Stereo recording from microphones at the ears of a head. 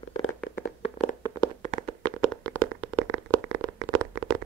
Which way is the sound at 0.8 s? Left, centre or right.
Right.